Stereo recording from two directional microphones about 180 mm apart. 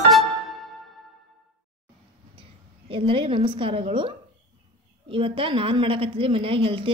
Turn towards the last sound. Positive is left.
turn(degrees=-30)  # may be behind; listen again after turning